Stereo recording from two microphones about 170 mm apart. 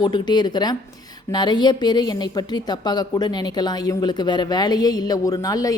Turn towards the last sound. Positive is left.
turn(degrees=20)  # may be behind; listen again after turning